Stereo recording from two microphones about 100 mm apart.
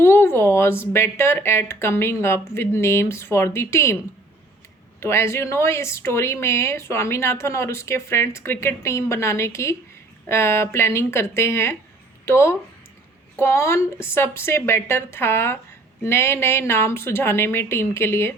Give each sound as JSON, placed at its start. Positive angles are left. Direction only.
{"t": 0.0, "sound": "speech", "side_deg": 25}
{"t": 4.9, "sound": "speech", "side_deg": 25}